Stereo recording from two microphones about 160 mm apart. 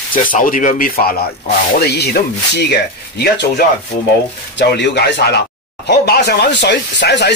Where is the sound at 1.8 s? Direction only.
90° left.